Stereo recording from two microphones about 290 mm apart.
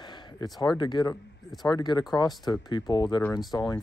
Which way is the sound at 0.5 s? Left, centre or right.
Centre.